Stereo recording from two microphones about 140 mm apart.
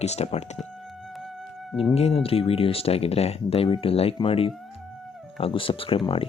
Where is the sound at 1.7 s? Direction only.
45° left (ahead or behind).